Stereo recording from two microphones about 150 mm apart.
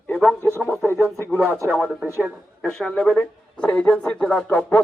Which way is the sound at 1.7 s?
5° right (ahead or behind).